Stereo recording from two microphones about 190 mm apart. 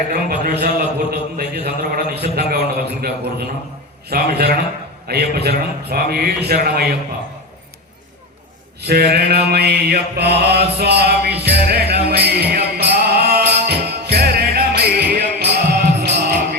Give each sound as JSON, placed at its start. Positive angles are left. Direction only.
{"t": 0.1, "sound": "a man's voice", "side_deg": -50}
{"t": 0.6, "sound": "a sound", "side_deg": -60}
{"t": 4.1, "sound": "a man's voice", "side_deg": -55}
{"t": 8.9, "sound": "mantra", "side_deg": -55}
{"t": 16.0, "sound": "music", "side_deg": -45}